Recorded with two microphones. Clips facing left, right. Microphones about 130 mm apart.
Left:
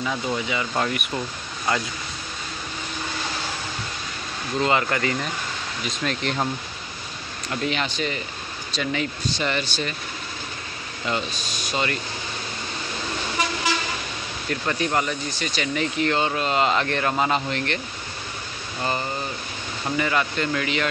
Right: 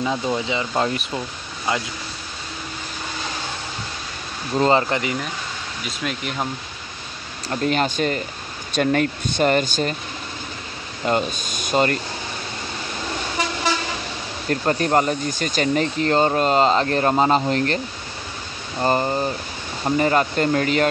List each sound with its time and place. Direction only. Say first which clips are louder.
0.0 s speech: right 3 dB; 20° right (ahead or behind)
4.6 s speech: right 5 dB; 35° right (ahead or behind)
4.8 s speech: right 1 dB; 20° right (ahead or behind)
5.9 s speech: left 1 dB; 5° right (ahead or behind)
7.4 s speech: right 5 dB; 45° right (ahead or behind)
11.1 s speech: right 6 dB; 50° right (ahead or behind)
14.5 s speech: right 5 dB; 40° right (ahead or behind)
18.8 s speech: right 7 dB; 40° right (ahead or behind)